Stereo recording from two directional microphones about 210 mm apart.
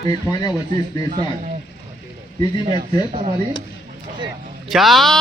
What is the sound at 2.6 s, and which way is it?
Speech, 30° right (ahead or behind).